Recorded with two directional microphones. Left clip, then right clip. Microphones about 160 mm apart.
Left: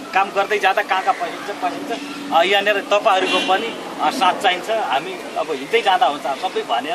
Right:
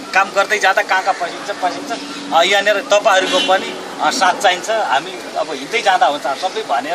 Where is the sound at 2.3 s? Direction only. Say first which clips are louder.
Right 3 dB; 5° right (ahead or behind).